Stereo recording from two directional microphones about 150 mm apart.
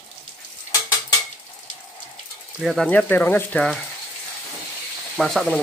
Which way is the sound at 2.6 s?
5° left (ahead or behind).